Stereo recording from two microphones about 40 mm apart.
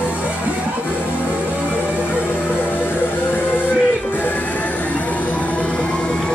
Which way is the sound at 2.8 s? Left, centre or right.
Left.